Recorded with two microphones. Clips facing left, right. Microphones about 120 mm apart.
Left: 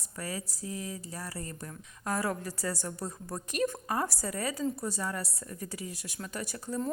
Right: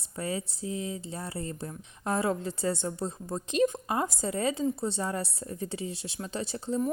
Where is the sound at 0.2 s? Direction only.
25° right (ahead or behind).